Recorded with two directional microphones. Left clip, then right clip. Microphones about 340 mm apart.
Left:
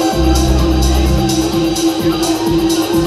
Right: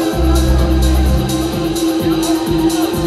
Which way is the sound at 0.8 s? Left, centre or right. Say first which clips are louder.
Left 3 dB; centre.